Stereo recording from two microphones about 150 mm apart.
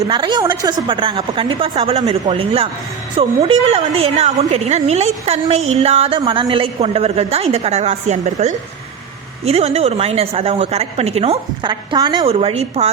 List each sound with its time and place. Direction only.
0.1 s a woman's voice: 30° right (ahead or behind)
12.2 s a woman's voice: 40° right (ahead or behind)